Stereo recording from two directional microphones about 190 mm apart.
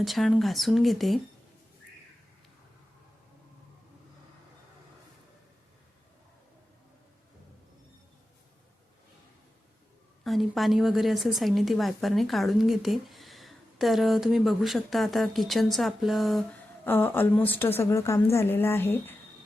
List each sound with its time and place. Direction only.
0.0 s speech: centre (ahead or behind)
10.2 s speech: centre (ahead or behind)